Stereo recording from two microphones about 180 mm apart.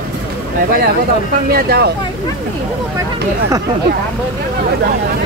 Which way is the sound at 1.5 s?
60° right (ahead or behind).